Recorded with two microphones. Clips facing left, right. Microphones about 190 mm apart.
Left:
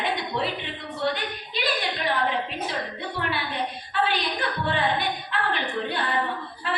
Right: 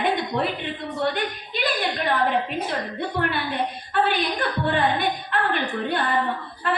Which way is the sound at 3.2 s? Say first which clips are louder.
Right 3 dB; 50° right (ahead or behind).